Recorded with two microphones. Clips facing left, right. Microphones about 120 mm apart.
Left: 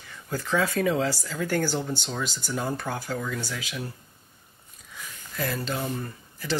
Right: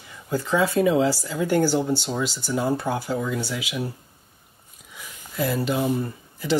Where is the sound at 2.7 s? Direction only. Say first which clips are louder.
Right 6 dB; 25° right (ahead or behind).